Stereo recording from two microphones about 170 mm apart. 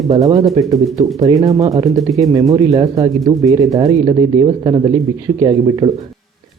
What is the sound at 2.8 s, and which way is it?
Speech, 35° right (ahead or behind).